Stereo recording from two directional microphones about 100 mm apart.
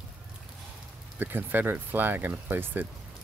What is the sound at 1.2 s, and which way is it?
Speech, 20° right (ahead or behind).